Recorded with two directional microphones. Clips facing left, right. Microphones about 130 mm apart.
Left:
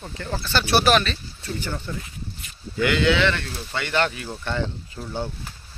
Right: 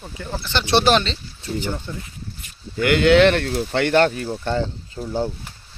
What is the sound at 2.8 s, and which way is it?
Speech, 55° right (ahead or behind).